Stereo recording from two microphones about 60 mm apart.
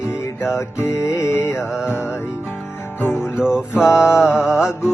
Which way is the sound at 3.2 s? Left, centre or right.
Centre.